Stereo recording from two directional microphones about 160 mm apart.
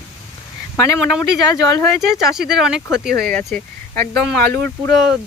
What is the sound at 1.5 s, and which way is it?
Speech, 20° left (ahead or behind).